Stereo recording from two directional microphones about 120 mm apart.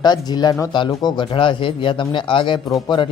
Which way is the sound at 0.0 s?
35° left (ahead or behind).